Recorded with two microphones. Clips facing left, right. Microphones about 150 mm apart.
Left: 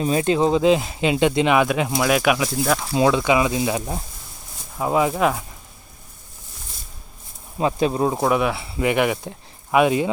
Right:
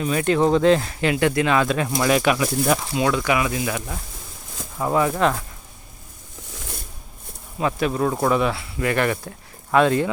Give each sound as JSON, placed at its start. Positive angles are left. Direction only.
{"t": 0.0, "sound": "speech", "side_deg": 25}
{"t": 3.1, "sound": "speech", "side_deg": 20}
{"t": 4.8, "sound": "speech", "side_deg": 15}
{"t": 7.6, "sound": "speech", "side_deg": 25}